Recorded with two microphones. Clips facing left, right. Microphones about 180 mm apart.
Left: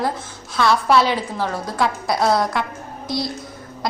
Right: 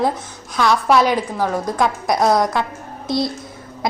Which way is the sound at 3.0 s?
25° right (ahead or behind).